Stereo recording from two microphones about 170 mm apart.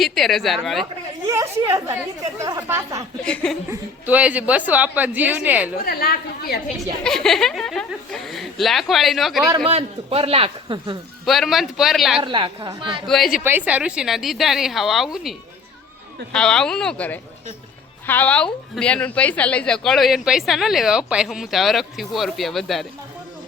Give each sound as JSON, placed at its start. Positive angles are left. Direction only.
{"t": 0.0, "sound": "a woman's voice", "side_deg": 0}
{"t": 1.3, "sound": "a woman's voice", "side_deg": -15}
{"t": 3.2, "sound": "a woman's voice", "side_deg": 5}
{"t": 3.7, "sound": "a woman's voice", "side_deg": -10}
{"t": 5.8, "sound": "a woman's voice", "side_deg": 65}
{"t": 7.0, "sound": "a woman's voice", "side_deg": 5}
{"t": 9.6, "sound": "a man's voice", "side_deg": -35}
{"t": 11.3, "sound": "a woman's voice", "side_deg": 0}
{"t": 12.2, "sound": "a woman's voice", "side_deg": -30}
{"t": 13.1, "sound": "a woman's voice", "side_deg": 0}
{"t": 13.4, "sound": "a woman's voice", "side_deg": -10}